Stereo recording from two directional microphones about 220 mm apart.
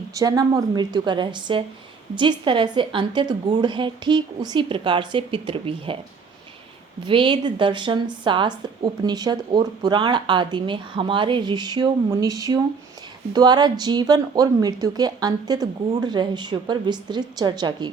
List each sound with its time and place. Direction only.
0.1 s speech: 15° right (ahead or behind)
7.0 s speech: 20° right (ahead or behind)